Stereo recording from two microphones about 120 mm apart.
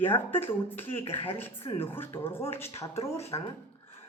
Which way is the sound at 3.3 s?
40° left (ahead or behind).